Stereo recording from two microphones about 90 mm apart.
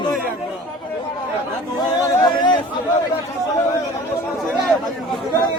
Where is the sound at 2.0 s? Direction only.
45° left (ahead or behind).